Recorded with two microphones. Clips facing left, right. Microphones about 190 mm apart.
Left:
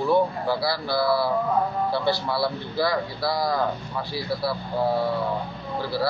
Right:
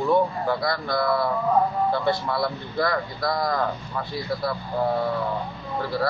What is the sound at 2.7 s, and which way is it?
Speech, 5° left (ahead or behind).